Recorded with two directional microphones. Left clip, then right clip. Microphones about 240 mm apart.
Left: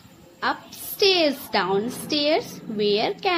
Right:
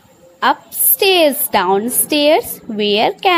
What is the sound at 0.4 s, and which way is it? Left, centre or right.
A woman's voice, right.